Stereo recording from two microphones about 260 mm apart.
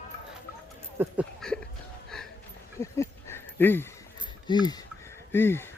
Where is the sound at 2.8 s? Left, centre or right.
Centre.